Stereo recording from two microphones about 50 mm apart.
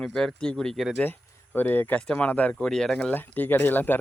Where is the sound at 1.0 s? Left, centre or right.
Left.